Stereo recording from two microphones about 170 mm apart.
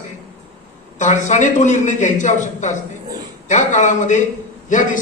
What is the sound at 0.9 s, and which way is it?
A man's voice, 45° left (ahead or behind).